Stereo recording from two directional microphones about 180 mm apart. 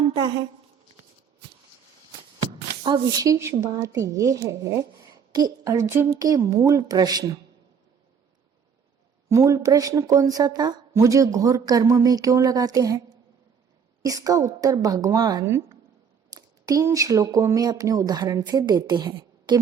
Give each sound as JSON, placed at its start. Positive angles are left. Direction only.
{"t": 2.4, "sound": "speech", "side_deg": -25}
{"t": 9.3, "sound": "speech", "side_deg": -15}